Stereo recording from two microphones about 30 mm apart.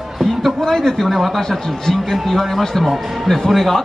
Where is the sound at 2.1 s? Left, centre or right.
Centre.